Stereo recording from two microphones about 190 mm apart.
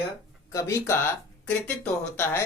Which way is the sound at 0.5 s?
15° left (ahead or behind).